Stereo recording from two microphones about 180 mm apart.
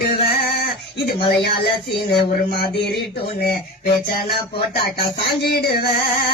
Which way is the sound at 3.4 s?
55° left (ahead or behind).